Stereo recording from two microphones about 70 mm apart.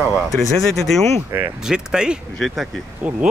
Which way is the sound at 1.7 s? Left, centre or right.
Centre.